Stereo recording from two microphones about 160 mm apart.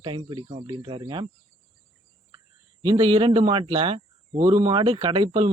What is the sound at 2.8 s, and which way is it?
A man's voice, 30° right (ahead or behind).